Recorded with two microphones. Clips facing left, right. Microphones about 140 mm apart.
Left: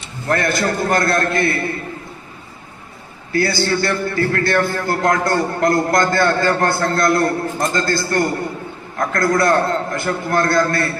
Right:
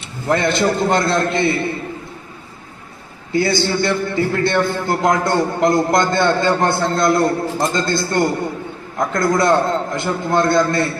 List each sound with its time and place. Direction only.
0.3 s a man's voice: 20° right (ahead or behind)
3.3 s a man's voice: 20° right (ahead or behind)